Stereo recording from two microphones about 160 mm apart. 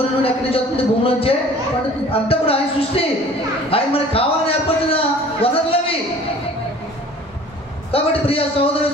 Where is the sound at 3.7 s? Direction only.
35° left (ahead or behind).